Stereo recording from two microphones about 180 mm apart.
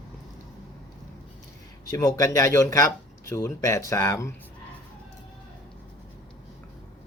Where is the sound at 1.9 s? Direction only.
20° left (ahead or behind).